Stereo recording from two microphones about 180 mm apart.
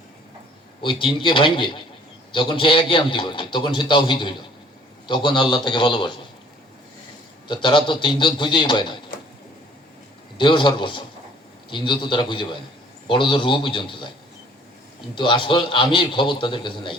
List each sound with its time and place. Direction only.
0.8 s a man's voice: 30° left (ahead or behind)
7.4 s a man's voice: 25° left (ahead or behind)
10.3 s a man's voice: 25° left (ahead or behind)
15.1 s a man's voice: 25° left (ahead or behind)